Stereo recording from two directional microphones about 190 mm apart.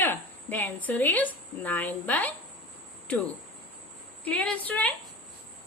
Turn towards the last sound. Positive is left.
turn(degrees=10)  # may be behind; listen again after turning